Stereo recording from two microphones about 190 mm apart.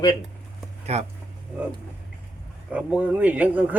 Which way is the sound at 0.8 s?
35° right (ahead or behind).